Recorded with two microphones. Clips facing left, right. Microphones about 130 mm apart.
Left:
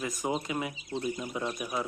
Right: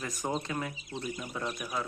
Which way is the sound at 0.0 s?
15° left (ahead or behind).